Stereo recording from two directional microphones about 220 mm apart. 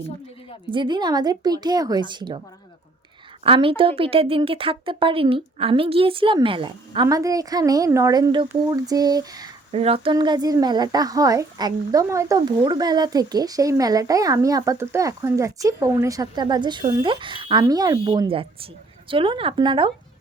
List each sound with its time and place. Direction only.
0.7 s speech: 20° right (ahead or behind)
3.4 s a woman's voice: 25° right (ahead or behind)